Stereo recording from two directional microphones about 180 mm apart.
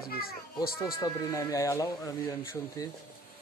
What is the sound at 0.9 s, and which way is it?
Speech, 20° left (ahead or behind).